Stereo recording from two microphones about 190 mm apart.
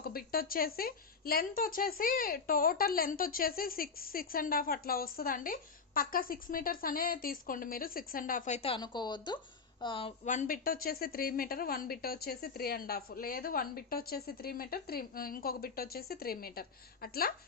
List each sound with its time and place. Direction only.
0.0 s a woman's voice: 50° left (ahead or behind); by 10.1 s 25° left (ahead or behind)
10.2 s a woman's voice: 45° left (ahead or behind)